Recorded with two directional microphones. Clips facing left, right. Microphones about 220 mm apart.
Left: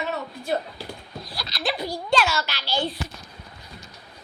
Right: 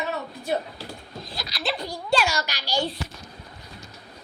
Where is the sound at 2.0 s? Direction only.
10° right (ahead or behind).